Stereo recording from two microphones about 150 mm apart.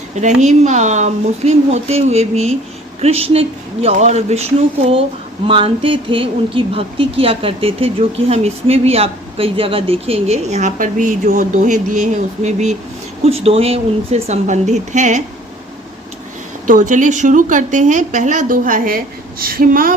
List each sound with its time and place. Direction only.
0.2 s speech: 50° right (ahead or behind)
5.5 s speech: 35° right (ahead or behind); by 15.2 s 50° right (ahead or behind)
16.6 s a woman's voice: 60° right (ahead or behind)
19.4 s speech: 75° right (ahead or behind)